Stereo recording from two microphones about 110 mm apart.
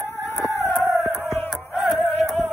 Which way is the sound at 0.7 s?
5° left (ahead or behind).